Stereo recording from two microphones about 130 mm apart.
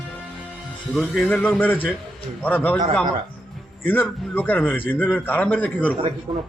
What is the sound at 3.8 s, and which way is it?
Speech, 15° left (ahead or behind).